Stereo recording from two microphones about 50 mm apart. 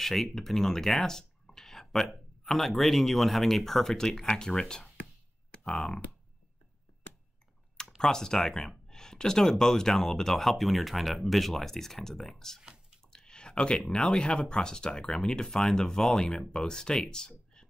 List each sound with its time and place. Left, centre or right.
0.0 s speech: centre
8.0 s speech: centre